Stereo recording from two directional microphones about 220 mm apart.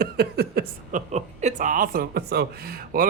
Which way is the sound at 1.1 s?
30° right (ahead or behind).